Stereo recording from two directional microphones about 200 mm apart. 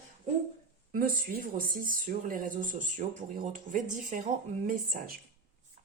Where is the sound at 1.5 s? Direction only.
45° right (ahead or behind).